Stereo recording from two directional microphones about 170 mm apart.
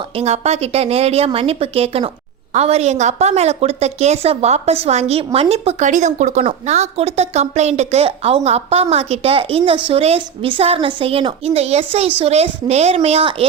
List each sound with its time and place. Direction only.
0.2 s a woman's voice: 40° right (ahead or behind)